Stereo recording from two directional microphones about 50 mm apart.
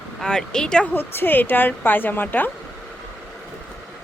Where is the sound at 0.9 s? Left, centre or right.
Left.